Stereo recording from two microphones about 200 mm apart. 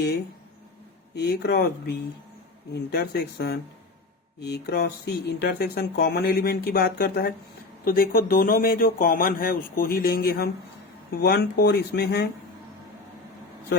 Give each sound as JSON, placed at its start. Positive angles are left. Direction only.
{"t": 1.1, "sound": "speech", "side_deg": 55}